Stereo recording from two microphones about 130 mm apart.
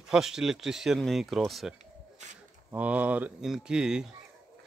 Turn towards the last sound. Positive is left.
turn(degrees=-5)  # may be behind; listen again after turning